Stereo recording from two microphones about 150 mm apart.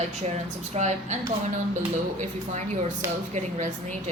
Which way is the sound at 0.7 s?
50° right (ahead or behind).